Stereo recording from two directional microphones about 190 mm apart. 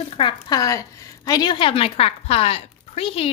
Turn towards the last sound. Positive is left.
turn(degrees=30)  # may be behind; listen again after turning